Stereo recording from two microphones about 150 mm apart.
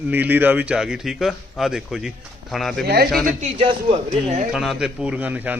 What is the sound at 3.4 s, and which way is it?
Speech, 40° right (ahead or behind).